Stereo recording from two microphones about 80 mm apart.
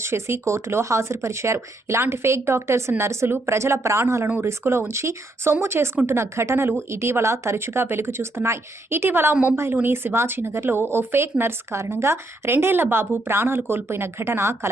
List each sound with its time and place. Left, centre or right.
0.0 s speech: right
9.3 s a woman's voice: centre
9.8 s speech: right